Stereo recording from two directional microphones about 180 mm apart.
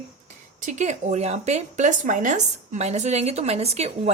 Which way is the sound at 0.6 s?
40° right (ahead or behind).